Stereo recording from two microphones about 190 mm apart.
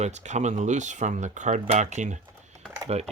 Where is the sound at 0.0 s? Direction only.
40° right (ahead or behind).